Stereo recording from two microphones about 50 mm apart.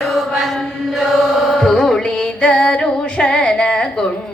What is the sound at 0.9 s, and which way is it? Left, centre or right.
Mantra, centre.